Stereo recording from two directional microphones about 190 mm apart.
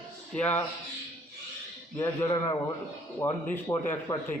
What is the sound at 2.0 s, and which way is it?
A man's voice, 15° left (ahead or behind).